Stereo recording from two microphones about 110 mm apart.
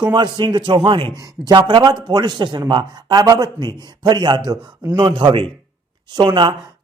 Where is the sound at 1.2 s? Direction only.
35° right (ahead or behind).